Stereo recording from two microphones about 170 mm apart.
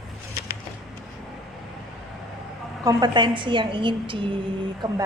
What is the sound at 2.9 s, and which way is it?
A woman's voice, 25° right (ahead or behind).